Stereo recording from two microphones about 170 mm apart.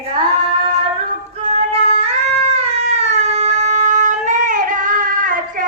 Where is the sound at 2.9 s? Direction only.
40° right (ahead or behind).